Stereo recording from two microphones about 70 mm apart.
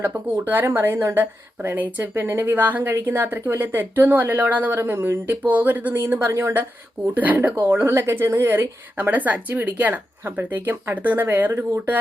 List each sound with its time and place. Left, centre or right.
0.0 s a woman's voice: right
4.8 s a woman's voice: right
7.1 s a woman's voice: right